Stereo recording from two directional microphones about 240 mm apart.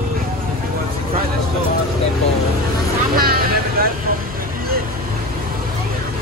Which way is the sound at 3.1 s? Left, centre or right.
Right.